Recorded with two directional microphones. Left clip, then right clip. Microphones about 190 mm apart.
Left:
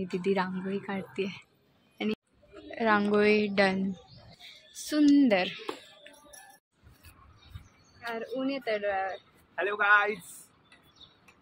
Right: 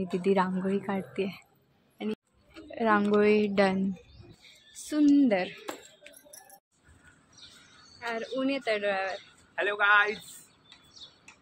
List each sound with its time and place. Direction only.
0.0 s a woman's voice: 10° right (ahead or behind)
2.7 s a woman's voice: 5° right (ahead or behind)
8.0 s a woman's voice: 20° right (ahead or behind)
9.6 s a man's voice: 5° right (ahead or behind)